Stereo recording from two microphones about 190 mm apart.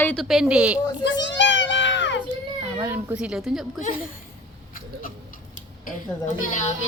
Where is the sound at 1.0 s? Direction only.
70° left (ahead or behind).